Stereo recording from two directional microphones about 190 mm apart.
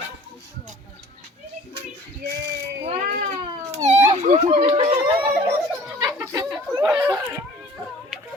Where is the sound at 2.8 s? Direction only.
35° right (ahead or behind).